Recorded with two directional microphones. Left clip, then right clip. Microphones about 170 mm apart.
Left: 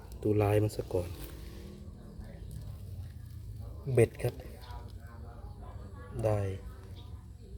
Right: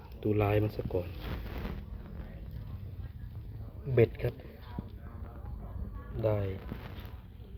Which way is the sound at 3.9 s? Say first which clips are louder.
Even; 10° left (ahead or behind).